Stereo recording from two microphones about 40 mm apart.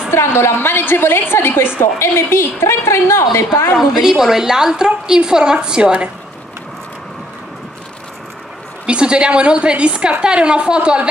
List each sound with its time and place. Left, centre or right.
0.1 s a woman's voice: left
1.8 s a woman's voice: left
3.7 s a woman's voice: centre
8.8 s a woman's voice: right